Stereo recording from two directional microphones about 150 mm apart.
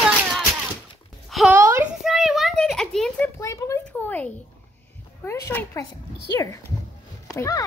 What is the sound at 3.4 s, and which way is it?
Speech, 20° left (ahead or behind).